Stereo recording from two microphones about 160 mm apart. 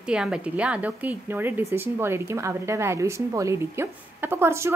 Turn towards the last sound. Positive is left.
turn(degrees=-15)  # may be behind; listen again after turning